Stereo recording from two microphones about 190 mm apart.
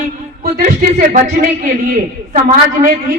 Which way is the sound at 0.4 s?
45° right (ahead or behind).